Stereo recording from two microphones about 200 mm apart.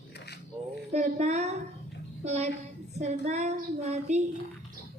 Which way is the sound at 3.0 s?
35° right (ahead or behind).